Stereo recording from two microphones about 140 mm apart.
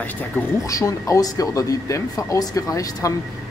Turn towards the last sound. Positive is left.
turn(degrees=25)  # may be behind; listen again after turning